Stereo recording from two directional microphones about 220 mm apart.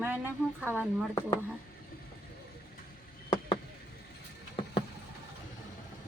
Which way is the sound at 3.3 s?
25° left (ahead or behind).